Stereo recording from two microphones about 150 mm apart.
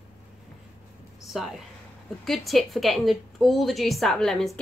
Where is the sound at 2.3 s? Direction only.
Centre (ahead or behind).